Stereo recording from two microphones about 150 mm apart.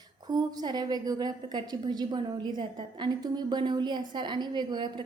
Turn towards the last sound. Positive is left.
turn(degrees=-30)  # may be behind; listen again after turning